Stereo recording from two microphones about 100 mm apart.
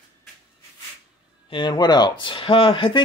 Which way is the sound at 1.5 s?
50° left (ahead or behind).